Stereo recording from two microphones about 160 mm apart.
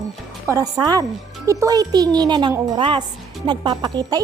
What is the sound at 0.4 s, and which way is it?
Speech, 20° right (ahead or behind).